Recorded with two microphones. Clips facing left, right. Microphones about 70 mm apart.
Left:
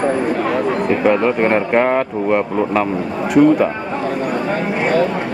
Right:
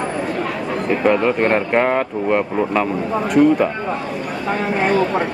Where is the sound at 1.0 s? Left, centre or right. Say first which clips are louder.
Even; centre.